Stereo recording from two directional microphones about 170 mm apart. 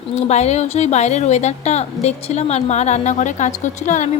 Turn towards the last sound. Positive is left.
turn(degrees=45)  # may be behind; listen again after turning